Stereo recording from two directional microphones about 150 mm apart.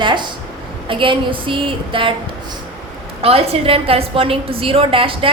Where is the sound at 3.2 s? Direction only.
40° right (ahead or behind).